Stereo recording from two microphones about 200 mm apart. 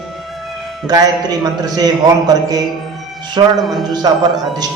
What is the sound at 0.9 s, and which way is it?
A man's voice, 20° right (ahead or behind).